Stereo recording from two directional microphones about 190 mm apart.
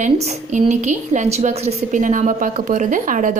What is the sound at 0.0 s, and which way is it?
A woman's voice, 35° right (ahead or behind).